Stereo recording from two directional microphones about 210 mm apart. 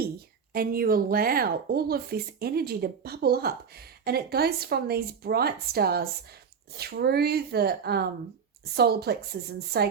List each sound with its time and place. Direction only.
0.5 s speech: 45° right (ahead or behind)